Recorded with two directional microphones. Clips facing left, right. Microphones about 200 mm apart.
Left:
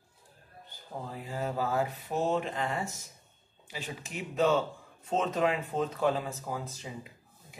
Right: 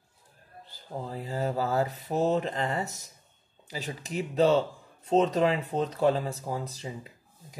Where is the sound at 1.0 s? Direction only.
35° right (ahead or behind).